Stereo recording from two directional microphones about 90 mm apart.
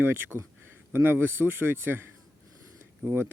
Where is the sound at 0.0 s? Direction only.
25° right (ahead or behind).